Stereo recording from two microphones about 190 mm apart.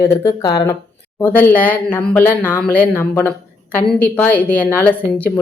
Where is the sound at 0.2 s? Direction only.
20° left (ahead or behind).